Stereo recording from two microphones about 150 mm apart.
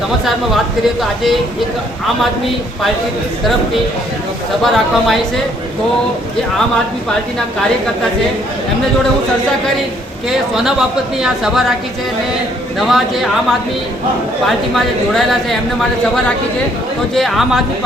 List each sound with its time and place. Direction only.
4.6 s speech: centre (ahead or behind)
10.2 s speech: 5° right (ahead or behind)
12.8 s speech: centre (ahead or behind)
15.1 s speech: centre (ahead or behind)
17.2 s speech: centre (ahead or behind)